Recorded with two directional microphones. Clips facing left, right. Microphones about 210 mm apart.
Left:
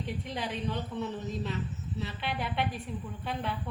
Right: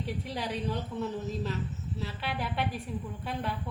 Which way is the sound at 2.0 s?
Centre (ahead or behind).